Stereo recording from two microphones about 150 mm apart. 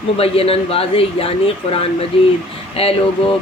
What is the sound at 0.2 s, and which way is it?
Speech, 40° left (ahead or behind).